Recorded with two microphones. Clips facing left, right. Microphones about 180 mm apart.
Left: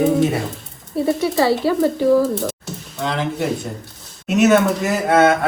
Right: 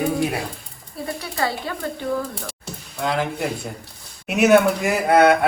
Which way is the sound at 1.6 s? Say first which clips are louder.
Left 12 dB; 30° left (ahead or behind).